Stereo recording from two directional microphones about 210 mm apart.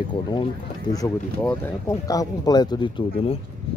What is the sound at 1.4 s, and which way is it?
Speech, 10° left (ahead or behind).